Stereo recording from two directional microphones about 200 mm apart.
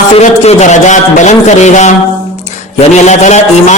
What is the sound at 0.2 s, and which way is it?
A man's voice, 35° left (ahead or behind).